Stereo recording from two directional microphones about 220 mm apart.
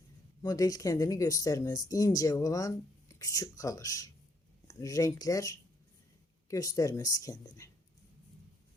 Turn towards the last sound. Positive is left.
turn(degrees=15)  # may be behind; listen again after turning